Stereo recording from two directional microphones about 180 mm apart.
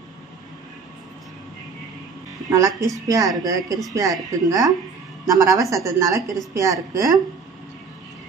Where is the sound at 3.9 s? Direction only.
20° right (ahead or behind).